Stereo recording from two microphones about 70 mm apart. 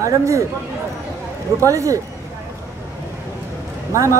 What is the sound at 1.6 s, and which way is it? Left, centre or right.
Speech, right.